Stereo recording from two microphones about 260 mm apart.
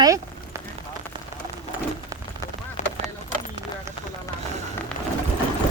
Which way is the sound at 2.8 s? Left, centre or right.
Left.